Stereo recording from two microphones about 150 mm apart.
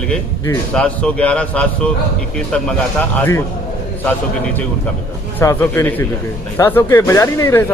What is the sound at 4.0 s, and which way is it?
Speech, 10° left (ahead or behind).